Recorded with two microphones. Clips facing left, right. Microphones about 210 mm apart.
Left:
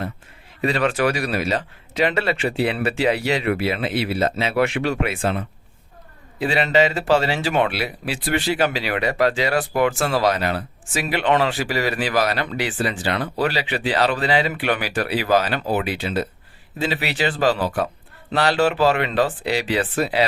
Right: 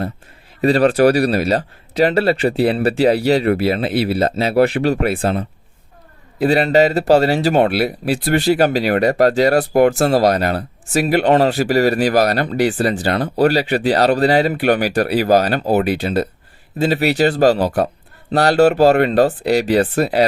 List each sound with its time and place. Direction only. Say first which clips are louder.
0.6 s speech: right 8 dB; 35° right (ahead or behind)